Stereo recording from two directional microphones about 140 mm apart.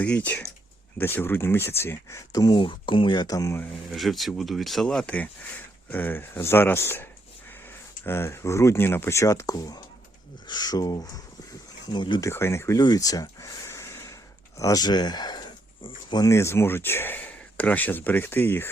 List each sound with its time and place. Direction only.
0.0 s speech: 10° left (ahead or behind)
3.8 s speech: centre (ahead or behind); by 12.2 s 35° left (ahead or behind)
12.2 s speech: 20° left (ahead or behind)
12.8 s a sound: 25° left (ahead or behind)
14.6 s speech: 25° left (ahead or behind)